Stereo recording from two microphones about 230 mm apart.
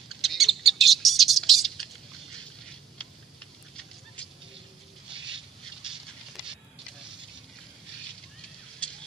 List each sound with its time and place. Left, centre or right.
0.1 s bird: centre
4.2 s goose: centre
8.8 s fire: centre